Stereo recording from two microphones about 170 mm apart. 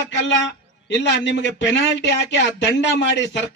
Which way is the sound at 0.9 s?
90° left.